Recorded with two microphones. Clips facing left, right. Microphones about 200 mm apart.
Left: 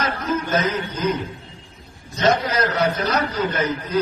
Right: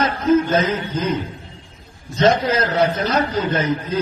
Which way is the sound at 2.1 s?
30° right (ahead or behind).